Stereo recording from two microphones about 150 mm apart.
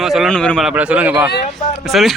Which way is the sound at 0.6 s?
10° right (ahead or behind).